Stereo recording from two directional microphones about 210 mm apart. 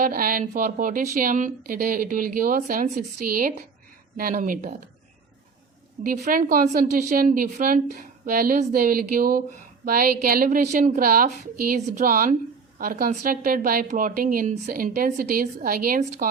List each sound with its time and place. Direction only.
0.0 s a woman's voice: 45° right (ahead or behind)
6.0 s speech: 45° right (ahead or behind)